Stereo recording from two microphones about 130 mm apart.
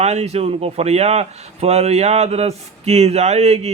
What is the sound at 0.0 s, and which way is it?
Speech, 55° right (ahead or behind).